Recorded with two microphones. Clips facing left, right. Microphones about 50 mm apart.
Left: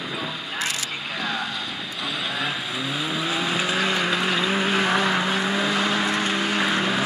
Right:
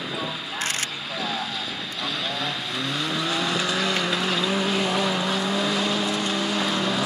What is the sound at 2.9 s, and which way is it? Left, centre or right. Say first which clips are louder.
Vehicle: even; centre.